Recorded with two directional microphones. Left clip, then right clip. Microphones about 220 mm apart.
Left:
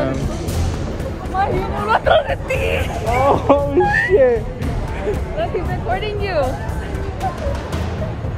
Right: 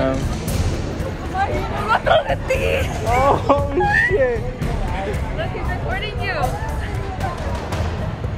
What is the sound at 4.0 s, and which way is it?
Speech, 20° left (ahead or behind).